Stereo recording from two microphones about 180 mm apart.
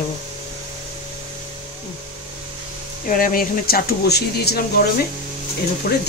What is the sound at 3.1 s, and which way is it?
Speech, 50° left (ahead or behind).